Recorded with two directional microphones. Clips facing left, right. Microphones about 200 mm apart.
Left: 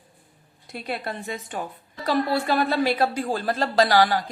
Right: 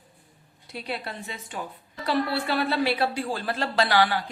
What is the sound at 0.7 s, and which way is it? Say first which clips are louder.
A woman's voice: left 3 dB; 50° left (ahead or behind).